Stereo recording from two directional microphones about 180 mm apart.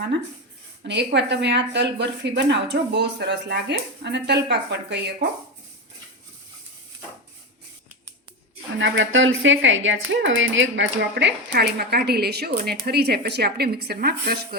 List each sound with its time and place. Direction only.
0.9 s speech: 75° right (ahead or behind)
8.8 s speech: 90° right; by 14.3 s 60° right (ahead or behind)